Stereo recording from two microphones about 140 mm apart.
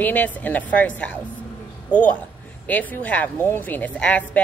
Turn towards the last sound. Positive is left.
turn(degrees=10)  # may be behind; listen again after turning